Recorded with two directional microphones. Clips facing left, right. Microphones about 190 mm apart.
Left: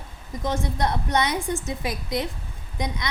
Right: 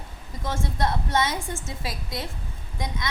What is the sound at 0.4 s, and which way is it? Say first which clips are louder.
A woman's voice: left 2 dB; 15° left (ahead or behind).